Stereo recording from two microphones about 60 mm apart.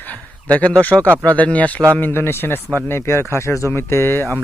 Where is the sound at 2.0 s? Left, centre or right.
Left.